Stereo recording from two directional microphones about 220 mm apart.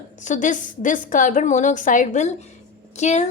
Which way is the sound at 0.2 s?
35° left (ahead or behind).